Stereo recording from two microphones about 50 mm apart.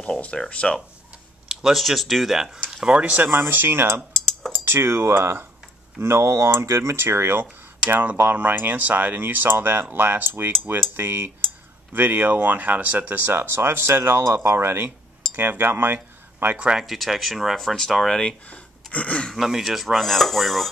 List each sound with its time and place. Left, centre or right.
0.0 s speech: left
1.5 s dishes: centre
2.8 s speech: right
3.3 s speech: right
8.2 s speech: right
15.3 s a sound: right
16.5 s speech: right
16.8 s dishes: centre
17.6 s speech: centre
18.5 s a sound: left
19.3 s dishes: centre